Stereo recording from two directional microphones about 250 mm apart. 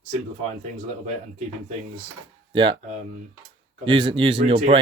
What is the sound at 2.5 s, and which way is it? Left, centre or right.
Speech, centre.